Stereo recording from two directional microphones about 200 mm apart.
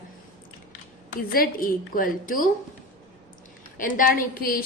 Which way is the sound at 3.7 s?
45° left (ahead or behind).